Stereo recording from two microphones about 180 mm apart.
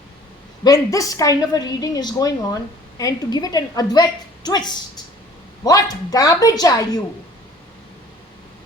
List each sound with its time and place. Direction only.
0.6 s a woman's voice: 20° left (ahead or behind)